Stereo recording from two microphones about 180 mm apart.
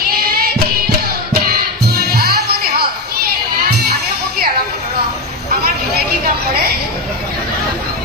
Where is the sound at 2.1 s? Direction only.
60° right (ahead or behind).